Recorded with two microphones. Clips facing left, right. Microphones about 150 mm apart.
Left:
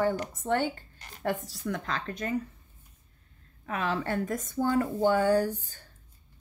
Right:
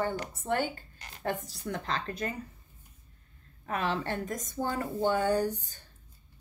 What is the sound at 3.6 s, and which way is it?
Speech, 35° right (ahead or behind).